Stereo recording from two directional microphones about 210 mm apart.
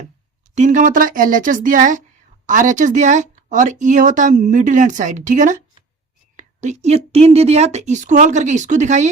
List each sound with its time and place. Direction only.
0.5 s speech: 35° right (ahead or behind)